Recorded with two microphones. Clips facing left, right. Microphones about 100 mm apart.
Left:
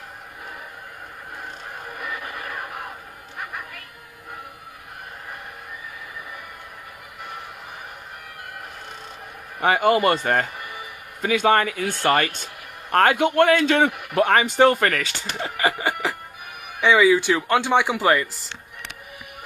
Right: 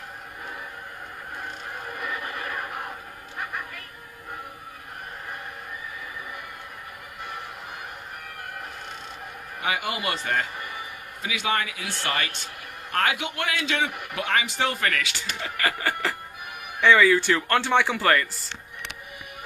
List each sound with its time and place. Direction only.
9.6 s a man's voice: 45° left (ahead or behind)
15.5 s a sound: 20° left (ahead or behind)
16.8 s speech: 10° left (ahead or behind)